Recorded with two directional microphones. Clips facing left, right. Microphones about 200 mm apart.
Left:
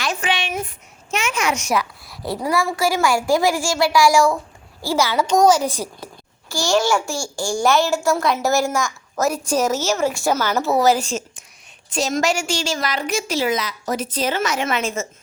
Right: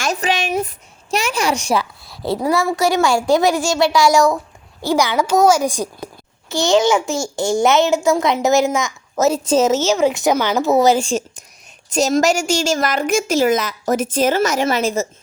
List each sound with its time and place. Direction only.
0.0 s a sound: 40° right (ahead or behind)
1.1 s a child's voice: 35° right (ahead or behind)
11.9 s a woman's voice: 40° right (ahead or behind)